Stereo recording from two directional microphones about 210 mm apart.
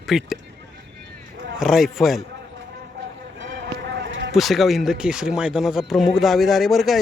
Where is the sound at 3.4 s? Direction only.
60° right (ahead or behind).